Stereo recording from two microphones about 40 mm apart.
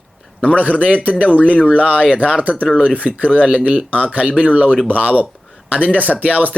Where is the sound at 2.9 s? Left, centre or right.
Right.